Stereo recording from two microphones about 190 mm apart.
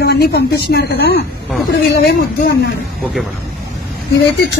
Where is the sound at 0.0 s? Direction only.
60° left (ahead or behind).